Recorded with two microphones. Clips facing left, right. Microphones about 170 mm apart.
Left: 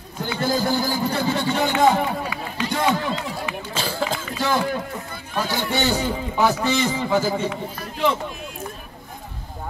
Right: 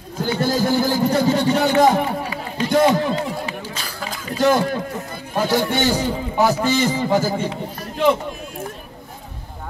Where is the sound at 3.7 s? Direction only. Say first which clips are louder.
Left 6 dB; 30° left (ahead or behind).